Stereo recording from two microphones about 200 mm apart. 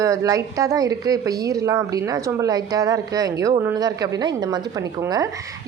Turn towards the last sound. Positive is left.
turn(degrees=-15)  # may be behind; listen again after turning